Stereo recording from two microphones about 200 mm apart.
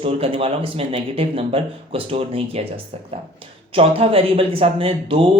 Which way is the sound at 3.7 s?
30° right (ahead or behind).